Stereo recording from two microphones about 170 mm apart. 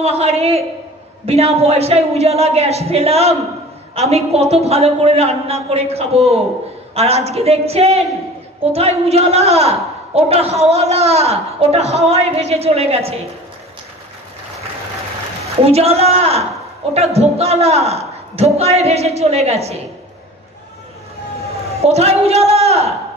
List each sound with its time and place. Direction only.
0.0 s a woman's voice: 40° right (ahead or behind)
15.4 s a woman's voice: 35° right (ahead or behind)
21.7 s a woman's voice: 35° right (ahead or behind)